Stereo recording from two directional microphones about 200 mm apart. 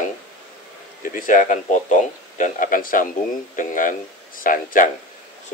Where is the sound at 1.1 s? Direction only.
40° left (ahead or behind).